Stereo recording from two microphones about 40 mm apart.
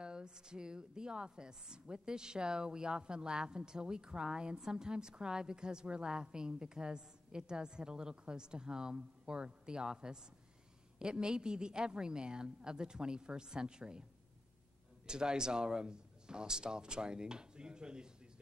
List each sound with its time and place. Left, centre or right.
0.0 s a woman's voice: right
15.0 s a woman's voice: centre